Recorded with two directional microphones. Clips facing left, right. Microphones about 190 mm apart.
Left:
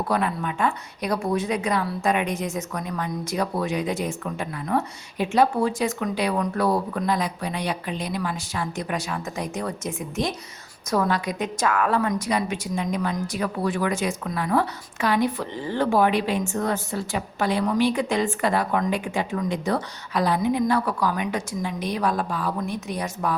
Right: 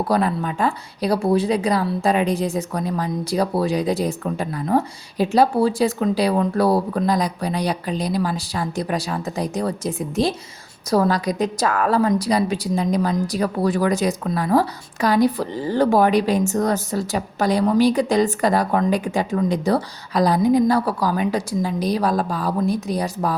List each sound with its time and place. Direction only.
0.1 s a woman's voice: 35° right (ahead or behind)